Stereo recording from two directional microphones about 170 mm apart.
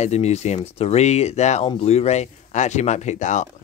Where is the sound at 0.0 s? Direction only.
40° left (ahead or behind).